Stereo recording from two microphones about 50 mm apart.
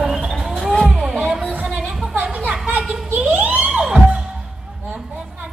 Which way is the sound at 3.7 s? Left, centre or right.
Centre.